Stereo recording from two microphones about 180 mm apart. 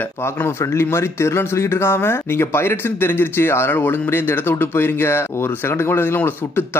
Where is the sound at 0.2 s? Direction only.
15° left (ahead or behind).